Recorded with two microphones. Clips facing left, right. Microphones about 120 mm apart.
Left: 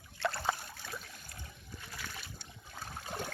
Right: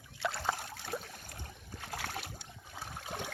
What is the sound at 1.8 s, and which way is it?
Boat, 90° right.